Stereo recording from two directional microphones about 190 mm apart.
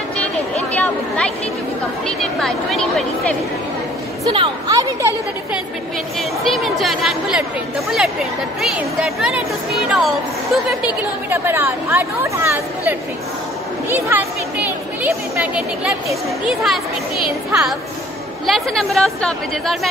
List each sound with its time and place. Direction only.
0.6 s a sound: 5° left (ahead or behind)
2.0 s speech: centre (ahead or behind)
4.2 s a woman's voice: 25° right (ahead or behind)
6.1 s speech: centre (ahead or behind)
11.2 s speech: 10° right (ahead or behind)